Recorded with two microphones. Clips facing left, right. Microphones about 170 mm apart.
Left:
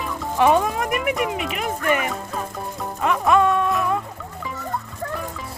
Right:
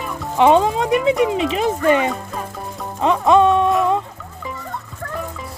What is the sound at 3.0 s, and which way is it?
Speech, 25° right (ahead or behind).